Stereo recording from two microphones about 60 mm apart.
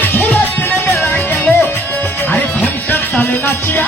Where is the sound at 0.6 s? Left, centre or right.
Left.